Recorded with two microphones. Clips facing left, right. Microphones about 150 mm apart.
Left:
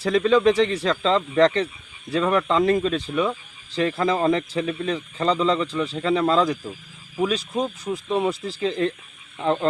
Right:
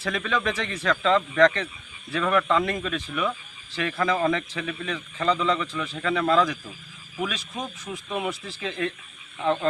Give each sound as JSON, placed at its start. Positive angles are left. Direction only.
{"t": 0.0, "sound": "a man's voice", "side_deg": 30}